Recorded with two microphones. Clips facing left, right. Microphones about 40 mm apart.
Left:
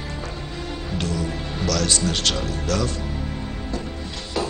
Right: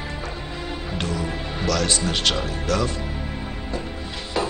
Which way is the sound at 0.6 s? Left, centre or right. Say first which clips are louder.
Even; centre.